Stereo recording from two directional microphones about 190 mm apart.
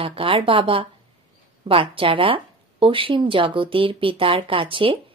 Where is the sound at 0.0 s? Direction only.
30° right (ahead or behind).